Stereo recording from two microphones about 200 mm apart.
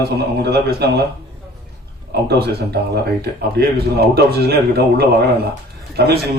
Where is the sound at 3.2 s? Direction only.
55° right (ahead or behind).